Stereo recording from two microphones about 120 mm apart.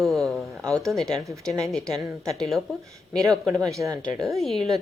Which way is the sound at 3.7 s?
25° right (ahead or behind).